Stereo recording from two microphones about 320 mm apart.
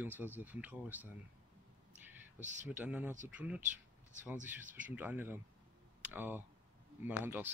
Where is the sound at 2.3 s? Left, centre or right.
Right.